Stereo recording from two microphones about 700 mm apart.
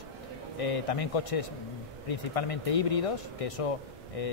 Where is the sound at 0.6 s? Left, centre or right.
Left.